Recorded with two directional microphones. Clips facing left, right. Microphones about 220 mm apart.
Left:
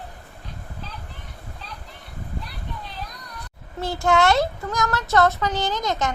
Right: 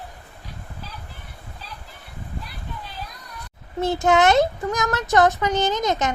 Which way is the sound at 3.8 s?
20° right (ahead or behind).